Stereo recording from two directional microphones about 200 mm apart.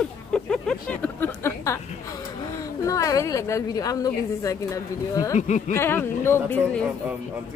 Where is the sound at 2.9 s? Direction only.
15° left (ahead or behind).